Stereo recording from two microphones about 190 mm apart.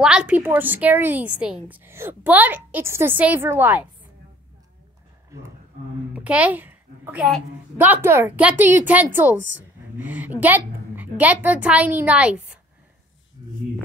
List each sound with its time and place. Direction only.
0.0 s a woman's voice: 5° right (ahead or behind)
5.3 s a child's voice: 15° right (ahead or behind)